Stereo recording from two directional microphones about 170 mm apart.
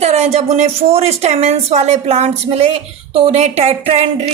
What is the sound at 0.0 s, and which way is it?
A woman's voice, 40° right (ahead or behind).